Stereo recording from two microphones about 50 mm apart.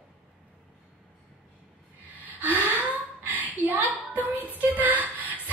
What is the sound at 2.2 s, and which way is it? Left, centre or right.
Gasp, right.